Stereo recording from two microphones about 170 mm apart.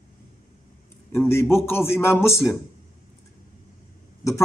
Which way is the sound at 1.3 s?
15° left (ahead or behind).